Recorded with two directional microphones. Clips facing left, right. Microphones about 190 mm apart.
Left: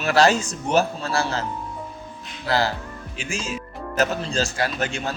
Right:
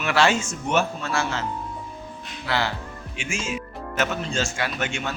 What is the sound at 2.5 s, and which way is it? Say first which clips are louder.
Speech: left 4 dB; 40° left (ahead or behind).